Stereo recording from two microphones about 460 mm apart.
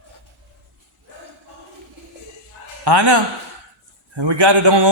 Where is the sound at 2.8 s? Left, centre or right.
Right.